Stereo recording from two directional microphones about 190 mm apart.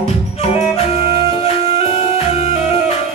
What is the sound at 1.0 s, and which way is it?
Music, 35° left (ahead or behind).